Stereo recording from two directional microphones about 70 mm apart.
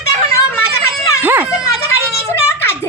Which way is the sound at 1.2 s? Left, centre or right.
Right.